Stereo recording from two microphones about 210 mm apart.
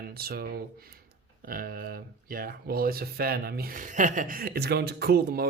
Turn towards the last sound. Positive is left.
turn(degrees=-50)  # may be behind; listen again after turning